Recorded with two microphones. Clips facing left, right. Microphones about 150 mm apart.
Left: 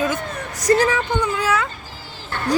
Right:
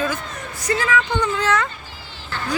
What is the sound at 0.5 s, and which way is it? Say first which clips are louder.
Speech: left 4 dB; 40° left (ahead or behind).